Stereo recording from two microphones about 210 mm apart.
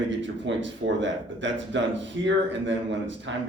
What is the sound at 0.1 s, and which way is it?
Speech, 60° right (ahead or behind).